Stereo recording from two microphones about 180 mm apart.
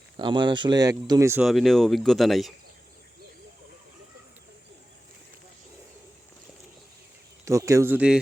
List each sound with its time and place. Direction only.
0.2 s speech: 25° right (ahead or behind)
1.4 s speech: centre (ahead or behind)
7.4 s speech: 15° right (ahead or behind)